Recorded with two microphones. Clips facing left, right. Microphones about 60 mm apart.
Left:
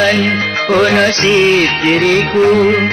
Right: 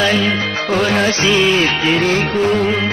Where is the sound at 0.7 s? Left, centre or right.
Left.